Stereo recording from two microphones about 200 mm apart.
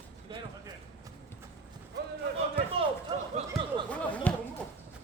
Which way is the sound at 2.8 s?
25° right (ahead or behind).